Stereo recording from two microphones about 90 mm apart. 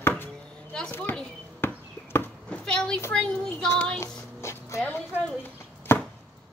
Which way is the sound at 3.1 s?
10° left (ahead or behind).